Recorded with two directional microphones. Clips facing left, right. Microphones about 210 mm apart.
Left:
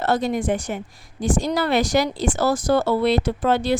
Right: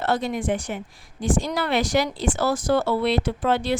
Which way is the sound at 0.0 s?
40° left (ahead or behind).